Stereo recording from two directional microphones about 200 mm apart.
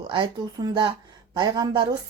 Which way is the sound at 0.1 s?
25° right (ahead or behind).